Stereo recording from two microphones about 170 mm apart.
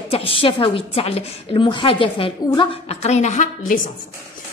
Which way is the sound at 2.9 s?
40° left (ahead or behind).